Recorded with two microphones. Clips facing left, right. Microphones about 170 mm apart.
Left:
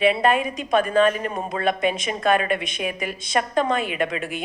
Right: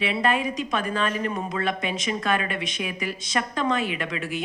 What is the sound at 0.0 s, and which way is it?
A woman's voice, 55° left (ahead or behind).